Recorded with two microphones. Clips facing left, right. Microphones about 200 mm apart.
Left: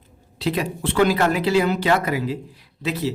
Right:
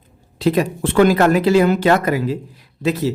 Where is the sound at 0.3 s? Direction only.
50° right (ahead or behind).